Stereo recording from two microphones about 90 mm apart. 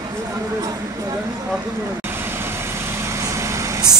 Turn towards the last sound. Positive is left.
turn(degrees=-35)  # may be behind; listen again after turning